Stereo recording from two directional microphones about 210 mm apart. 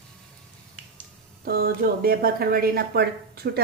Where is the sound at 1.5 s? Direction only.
45° right (ahead or behind).